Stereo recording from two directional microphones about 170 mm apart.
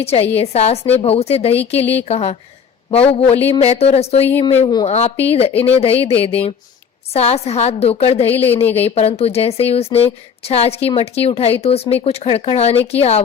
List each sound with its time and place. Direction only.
0.0 s speech: 35° left (ahead or behind)
4.9 s speech: 40° left (ahead or behind)